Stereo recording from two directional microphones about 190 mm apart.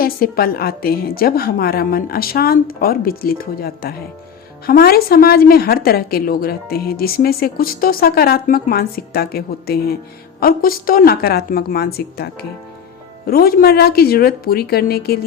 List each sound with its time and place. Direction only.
0.0 s a woman's voice: 50° left (ahead or behind)